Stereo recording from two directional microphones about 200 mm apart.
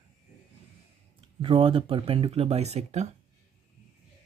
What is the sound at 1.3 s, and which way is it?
Speech, 25° right (ahead or behind).